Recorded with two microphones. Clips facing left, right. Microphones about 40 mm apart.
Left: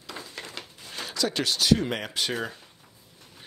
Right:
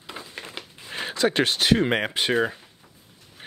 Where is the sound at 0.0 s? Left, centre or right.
Right.